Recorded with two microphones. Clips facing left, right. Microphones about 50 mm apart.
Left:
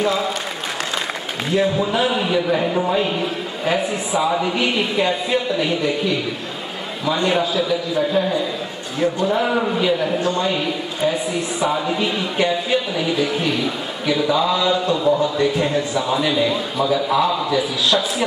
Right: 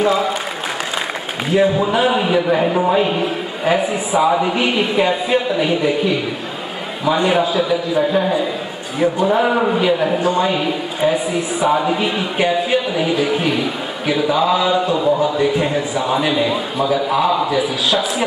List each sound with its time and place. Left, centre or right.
0.0 s applause: centre
1.5 s speech: centre
4.2 s speech: centre